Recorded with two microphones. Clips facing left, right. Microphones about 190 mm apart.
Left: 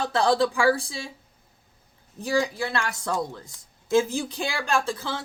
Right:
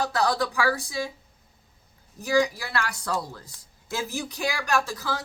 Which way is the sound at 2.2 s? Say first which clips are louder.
Right 1 dB; 30° left (ahead or behind).